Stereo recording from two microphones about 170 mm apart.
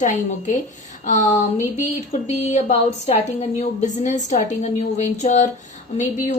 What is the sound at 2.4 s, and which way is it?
A woman's voice, 40° left (ahead or behind).